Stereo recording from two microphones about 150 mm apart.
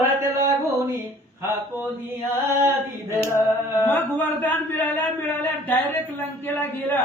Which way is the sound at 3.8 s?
10° left (ahead or behind).